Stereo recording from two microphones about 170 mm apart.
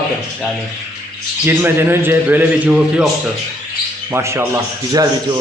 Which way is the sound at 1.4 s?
15° right (ahead or behind).